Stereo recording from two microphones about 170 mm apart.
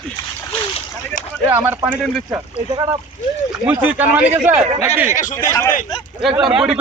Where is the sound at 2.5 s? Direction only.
25° right (ahead or behind).